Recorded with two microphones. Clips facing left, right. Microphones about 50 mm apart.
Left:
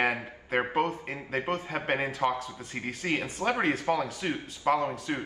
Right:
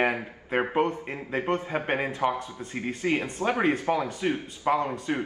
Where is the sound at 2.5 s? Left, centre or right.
Right.